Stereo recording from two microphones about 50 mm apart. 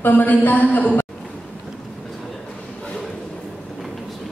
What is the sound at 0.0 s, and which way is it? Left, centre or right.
Speech, left.